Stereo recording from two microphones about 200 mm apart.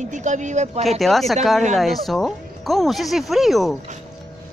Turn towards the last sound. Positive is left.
turn(degrees=0)  # may be behind; listen again after turning